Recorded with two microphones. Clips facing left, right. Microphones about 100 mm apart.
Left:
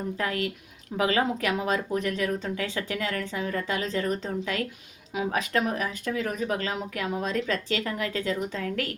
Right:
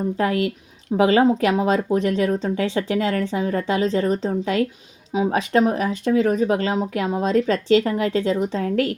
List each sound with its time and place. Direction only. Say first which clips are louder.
0.2 s speech: right 8 dB; 30° right (ahead or behind)